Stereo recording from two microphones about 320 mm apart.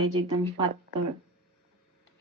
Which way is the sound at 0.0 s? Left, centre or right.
Right.